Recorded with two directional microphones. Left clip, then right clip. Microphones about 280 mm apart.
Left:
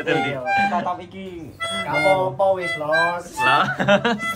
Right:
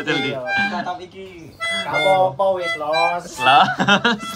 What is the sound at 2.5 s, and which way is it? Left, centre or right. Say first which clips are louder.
Speech: even; right.